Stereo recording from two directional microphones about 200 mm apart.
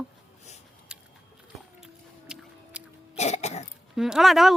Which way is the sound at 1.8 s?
5° right (ahead or behind).